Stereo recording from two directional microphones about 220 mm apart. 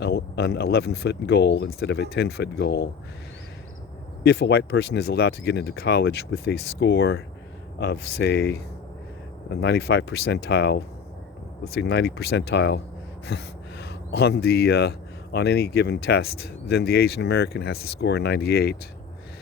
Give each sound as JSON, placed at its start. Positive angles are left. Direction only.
{"t": 0.0, "sound": "speech", "side_deg": 50}
{"t": 4.2, "sound": "speech", "side_deg": 50}